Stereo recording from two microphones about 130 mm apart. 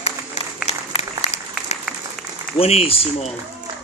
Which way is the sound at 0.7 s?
50° left (ahead or behind).